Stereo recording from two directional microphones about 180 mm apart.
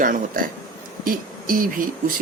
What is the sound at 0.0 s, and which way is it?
Speech, 50° right (ahead or behind).